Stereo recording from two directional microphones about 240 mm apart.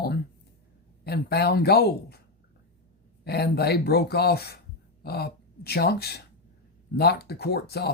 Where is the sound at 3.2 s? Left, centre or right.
Left.